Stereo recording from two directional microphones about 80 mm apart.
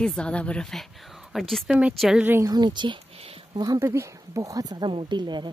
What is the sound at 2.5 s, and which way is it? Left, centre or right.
Speech, right.